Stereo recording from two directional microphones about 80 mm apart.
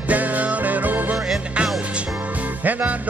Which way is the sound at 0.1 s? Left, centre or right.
Centre.